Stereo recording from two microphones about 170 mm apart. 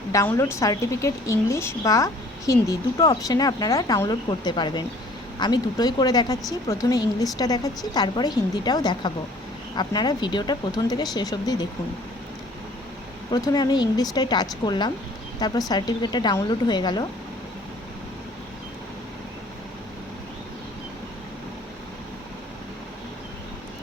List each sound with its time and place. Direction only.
0.1 s a woman's voice: 20° left (ahead or behind)
13.3 s speech: 25° left (ahead or behind)